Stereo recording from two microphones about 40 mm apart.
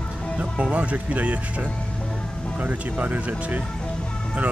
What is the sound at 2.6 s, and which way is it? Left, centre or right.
Speech, right.